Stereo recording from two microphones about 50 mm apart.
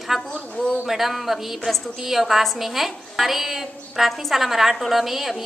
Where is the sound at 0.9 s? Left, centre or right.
Centre.